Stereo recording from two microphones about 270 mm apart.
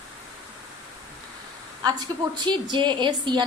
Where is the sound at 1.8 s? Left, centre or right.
Centre.